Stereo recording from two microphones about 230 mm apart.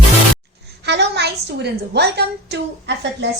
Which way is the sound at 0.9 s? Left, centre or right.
Right.